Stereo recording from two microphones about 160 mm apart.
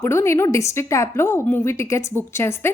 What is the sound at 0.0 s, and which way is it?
A woman's voice, 15° left (ahead or behind).